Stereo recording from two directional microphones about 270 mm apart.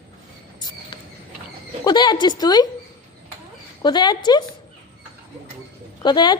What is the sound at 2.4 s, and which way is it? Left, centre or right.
Speech, centre.